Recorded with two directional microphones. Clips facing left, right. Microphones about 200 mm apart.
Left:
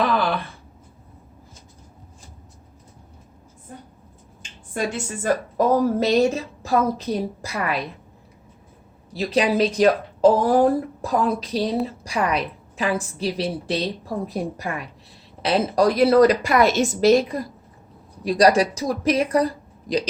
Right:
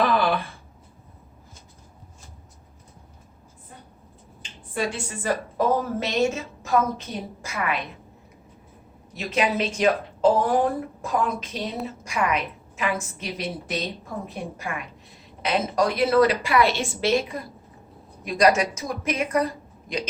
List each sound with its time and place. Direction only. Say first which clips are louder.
4.7 s a woman's voice: left 2 dB; 45° left (ahead or behind)
9.1 s a woman's voice: left 5 dB; 35° left (ahead or behind)